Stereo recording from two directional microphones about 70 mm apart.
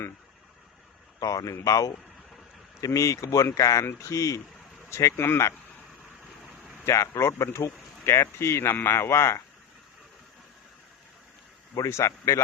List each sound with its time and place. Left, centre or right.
1.2 s speech: left
5.1 s speech: left
6.8 s speech: left
11.7 s speech: left